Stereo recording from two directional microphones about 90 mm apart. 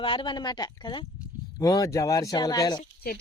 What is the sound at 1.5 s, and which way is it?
Speech, 40° left (ahead or behind).